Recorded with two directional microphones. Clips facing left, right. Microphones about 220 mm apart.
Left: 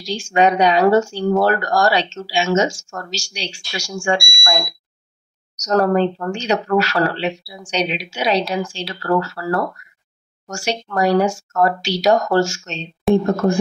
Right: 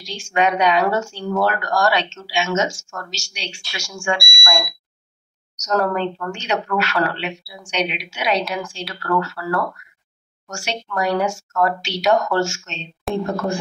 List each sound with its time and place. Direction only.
0.0 s speech: 35° left (ahead or behind)
13.1 s speech: centre (ahead or behind)